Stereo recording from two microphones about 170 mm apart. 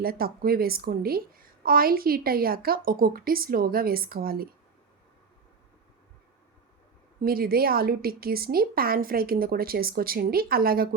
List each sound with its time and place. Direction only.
0.0 s a woman's voice: 60° right (ahead or behind)
7.2 s a woman's voice: 60° right (ahead or behind)